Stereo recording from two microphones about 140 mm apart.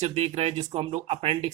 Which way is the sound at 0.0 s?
50° right (ahead or behind).